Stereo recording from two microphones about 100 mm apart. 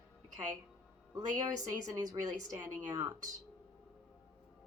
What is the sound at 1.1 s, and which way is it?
A woman's voice, 40° right (ahead or behind).